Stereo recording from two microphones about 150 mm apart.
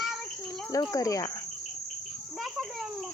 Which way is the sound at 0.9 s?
20° left (ahead or behind).